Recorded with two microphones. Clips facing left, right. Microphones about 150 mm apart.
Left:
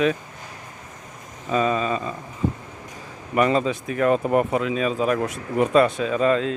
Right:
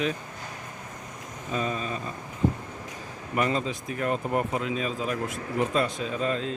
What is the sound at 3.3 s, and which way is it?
Speech, 90° left.